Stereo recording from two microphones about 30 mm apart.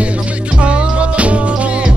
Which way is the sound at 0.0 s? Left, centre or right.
Right.